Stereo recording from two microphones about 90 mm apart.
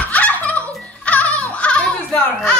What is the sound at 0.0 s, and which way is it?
Music, 15° left (ahead or behind).